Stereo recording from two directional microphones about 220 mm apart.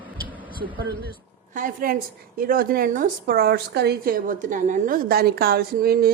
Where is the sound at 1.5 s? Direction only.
40° right (ahead or behind).